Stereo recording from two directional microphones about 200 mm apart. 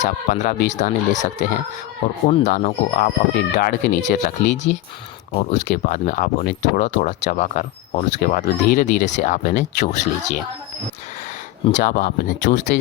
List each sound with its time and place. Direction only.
0.0 s speech: 40° left (ahead or behind)
5.5 s speech: 55° left (ahead or behind)
5.8 s speech: 40° left (ahead or behind)
11.6 s speech: 40° left (ahead or behind); by 12.8 s 60° left (ahead or behind)